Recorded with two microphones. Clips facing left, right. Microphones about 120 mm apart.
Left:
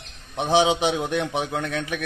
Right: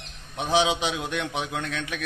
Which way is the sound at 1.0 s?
35° left (ahead or behind).